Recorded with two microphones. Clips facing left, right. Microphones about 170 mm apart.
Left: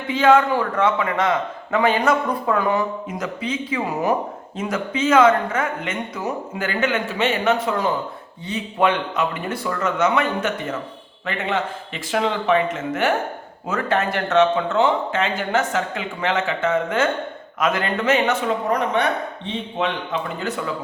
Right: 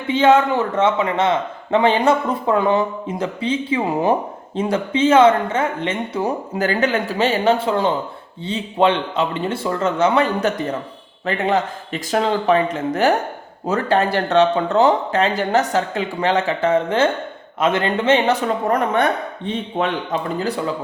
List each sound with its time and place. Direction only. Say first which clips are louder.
0.1 s a man's voice: right 2 dB; 25° right (ahead or behind)
19.5 s a man's voice: right 4 dB; 50° right (ahead or behind)